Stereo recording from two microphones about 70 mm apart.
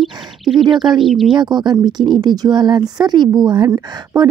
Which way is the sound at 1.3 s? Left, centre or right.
Right.